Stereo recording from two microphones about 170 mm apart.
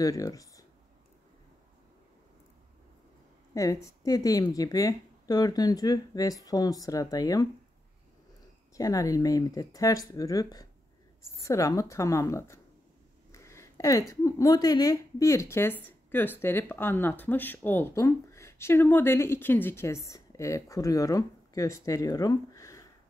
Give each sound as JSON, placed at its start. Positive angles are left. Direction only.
{"t": 0.0, "sound": "a woman's voice", "side_deg": 20}
{"t": 3.5, "sound": "a woman's voice", "side_deg": 20}
{"t": 8.7, "sound": "a woman's voice", "side_deg": 20}
{"t": 13.3, "sound": "a sound", "side_deg": 15}
{"t": 14.2, "sound": "speech", "side_deg": 20}